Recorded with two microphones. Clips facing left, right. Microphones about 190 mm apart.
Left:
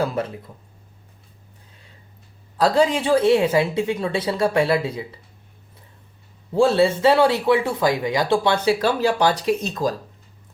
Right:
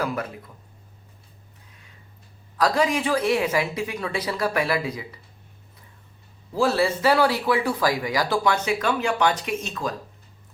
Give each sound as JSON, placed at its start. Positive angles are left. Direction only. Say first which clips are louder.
{"t": 2.6, "sound": "speech", "louder": "left 4 dB", "side_deg": 30}
{"t": 6.5, "sound": "speech", "louder": "left 5 dB", "side_deg": 25}